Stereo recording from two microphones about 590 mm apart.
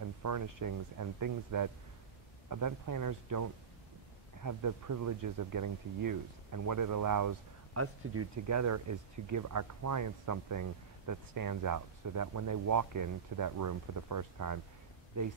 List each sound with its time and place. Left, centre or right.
0.2 s speech: right